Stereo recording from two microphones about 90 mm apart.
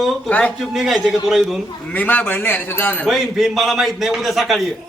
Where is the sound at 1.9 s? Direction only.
20° left (ahead or behind).